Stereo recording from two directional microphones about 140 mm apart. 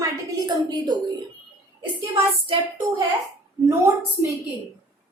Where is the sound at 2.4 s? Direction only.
35° right (ahead or behind).